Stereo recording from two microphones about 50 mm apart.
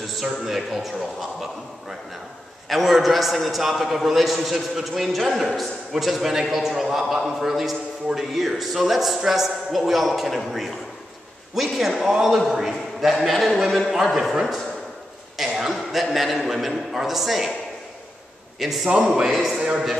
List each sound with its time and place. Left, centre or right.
0.0 s a man's voice: centre
18.6 s a man's voice: centre
18.9 s a man's voice: centre
19.3 s a man's voice: centre